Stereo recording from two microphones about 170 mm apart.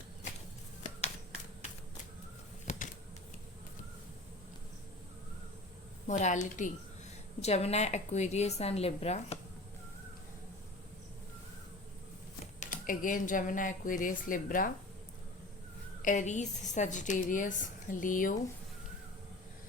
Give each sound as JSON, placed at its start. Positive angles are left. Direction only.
{"t": 2.6, "sound": "a sound", "side_deg": 45}
{"t": 6.1, "sound": "a woman's voice", "side_deg": 45}
{"t": 12.5, "sound": "a woman's voice", "side_deg": 55}
{"t": 16.0, "sound": "a woman's voice", "side_deg": 45}